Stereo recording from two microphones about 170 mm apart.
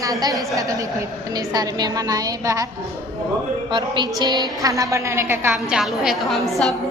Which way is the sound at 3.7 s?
25° right (ahead or behind).